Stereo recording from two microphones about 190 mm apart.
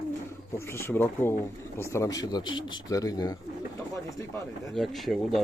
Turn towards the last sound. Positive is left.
turn(degrees=0)  # may be behind; listen again after turning